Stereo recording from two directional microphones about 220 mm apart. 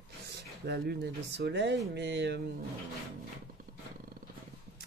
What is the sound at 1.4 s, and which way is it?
Speech, 50° right (ahead or behind).